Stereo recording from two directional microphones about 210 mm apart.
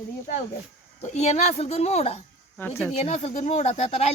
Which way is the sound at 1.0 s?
30° left (ahead or behind).